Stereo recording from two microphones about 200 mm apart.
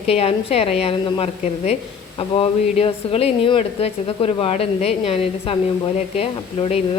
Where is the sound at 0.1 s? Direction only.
30° left (ahead or behind).